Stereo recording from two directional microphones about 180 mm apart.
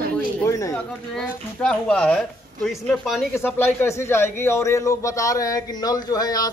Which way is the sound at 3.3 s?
15° left (ahead or behind).